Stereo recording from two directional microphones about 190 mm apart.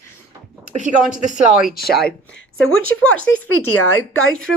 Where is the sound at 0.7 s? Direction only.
40° right (ahead or behind).